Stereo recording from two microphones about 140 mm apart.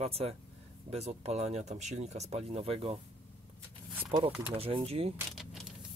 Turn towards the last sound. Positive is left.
turn(degrees=-5)  # may be behind; listen again after turning